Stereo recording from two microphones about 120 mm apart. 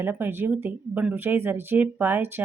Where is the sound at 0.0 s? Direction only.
15° right (ahead or behind).